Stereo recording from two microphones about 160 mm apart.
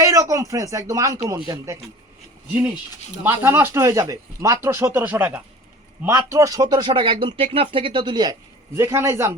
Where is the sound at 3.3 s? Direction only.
15° right (ahead or behind).